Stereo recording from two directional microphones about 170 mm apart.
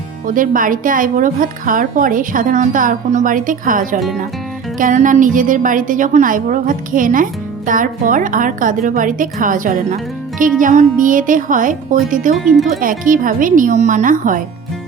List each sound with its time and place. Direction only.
0.3 s a woman's voice: 55° right (ahead or behind)